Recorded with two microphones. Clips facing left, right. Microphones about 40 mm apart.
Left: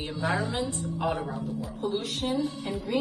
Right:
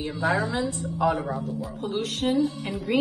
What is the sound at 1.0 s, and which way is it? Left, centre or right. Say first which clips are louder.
Speech: right 6 dB; centre.